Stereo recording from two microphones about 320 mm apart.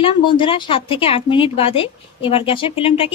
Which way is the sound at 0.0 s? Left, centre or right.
Centre.